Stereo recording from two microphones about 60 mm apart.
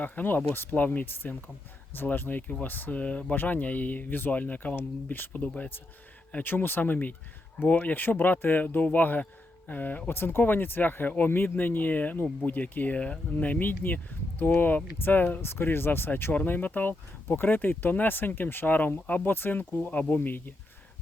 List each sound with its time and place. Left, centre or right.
0.0 s speech: left